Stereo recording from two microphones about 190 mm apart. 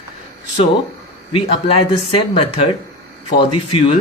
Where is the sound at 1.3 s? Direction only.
30° left (ahead or behind).